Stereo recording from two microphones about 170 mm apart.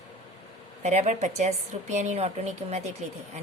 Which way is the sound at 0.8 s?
45° right (ahead or behind).